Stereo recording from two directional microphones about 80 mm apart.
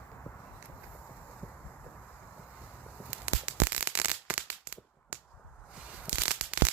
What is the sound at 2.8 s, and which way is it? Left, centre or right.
Fireworks, right.